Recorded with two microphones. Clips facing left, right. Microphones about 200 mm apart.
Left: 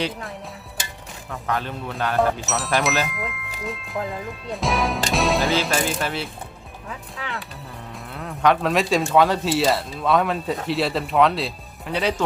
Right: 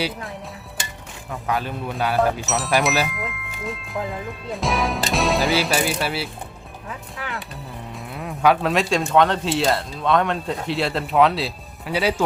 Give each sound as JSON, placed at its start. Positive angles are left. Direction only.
{"t": 0.0, "sound": "a man's voice", "side_deg": 0}
{"t": 2.1, "sound": "a man's voice", "side_deg": 0}
{"t": 8.1, "sound": "speech", "side_deg": -15}